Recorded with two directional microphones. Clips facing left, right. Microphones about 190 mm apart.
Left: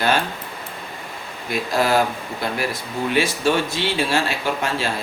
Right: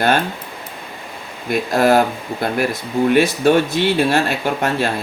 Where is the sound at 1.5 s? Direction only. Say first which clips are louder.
Right 5 dB; 50° right (ahead or behind).